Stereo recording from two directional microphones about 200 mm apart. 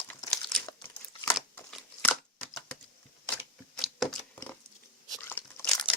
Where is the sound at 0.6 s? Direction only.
20° left (ahead or behind).